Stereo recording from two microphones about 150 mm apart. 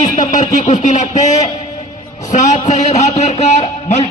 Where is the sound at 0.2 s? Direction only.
55° left (ahead or behind).